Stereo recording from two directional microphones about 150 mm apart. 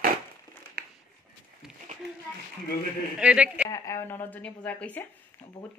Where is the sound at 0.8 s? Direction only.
90° right.